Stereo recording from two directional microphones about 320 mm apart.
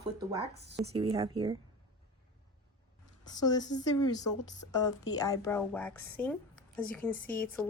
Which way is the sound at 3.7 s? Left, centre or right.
Centre.